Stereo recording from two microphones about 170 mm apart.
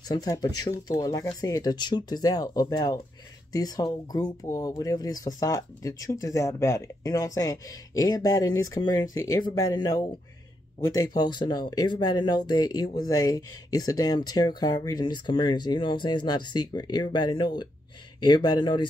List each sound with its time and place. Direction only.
0.1 s speech: 20° left (ahead or behind)